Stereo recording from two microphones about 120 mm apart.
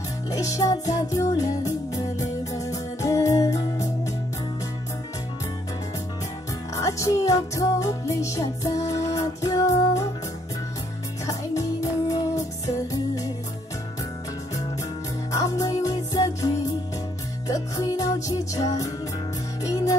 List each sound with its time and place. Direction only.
0.3 s music: 30° left (ahead or behind)
6.7 s music: 25° left (ahead or behind)
11.2 s music: 25° left (ahead or behind)
15.3 s music: 25° left (ahead or behind)